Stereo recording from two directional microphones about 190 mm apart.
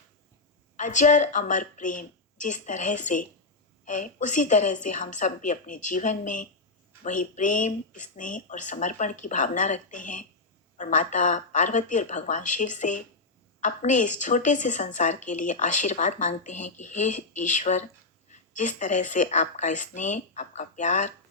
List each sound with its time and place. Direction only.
0.8 s a woman's voice: 40° left (ahead or behind)